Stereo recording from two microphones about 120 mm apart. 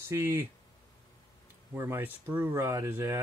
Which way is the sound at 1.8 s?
20° right (ahead or behind).